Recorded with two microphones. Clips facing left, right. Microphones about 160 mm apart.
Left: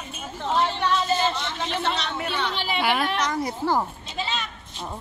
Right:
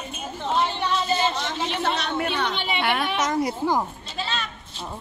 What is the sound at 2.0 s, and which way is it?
Speech, 55° right (ahead or behind).